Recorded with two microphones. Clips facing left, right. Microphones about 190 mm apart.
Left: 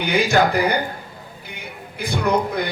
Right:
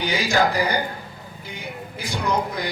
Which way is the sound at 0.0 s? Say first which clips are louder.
Left 3 dB; 60° left (ahead or behind).